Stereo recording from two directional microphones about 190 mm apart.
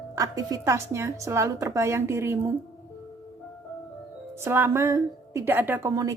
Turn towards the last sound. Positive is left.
turn(degrees=-15)  # may be behind; listen again after turning